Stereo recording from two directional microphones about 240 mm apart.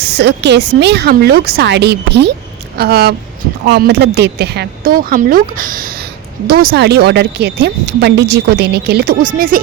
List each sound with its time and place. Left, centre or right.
0.0 s speech: right